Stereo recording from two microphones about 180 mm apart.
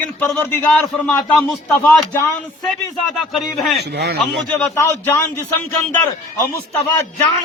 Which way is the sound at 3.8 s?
70° right (ahead or behind).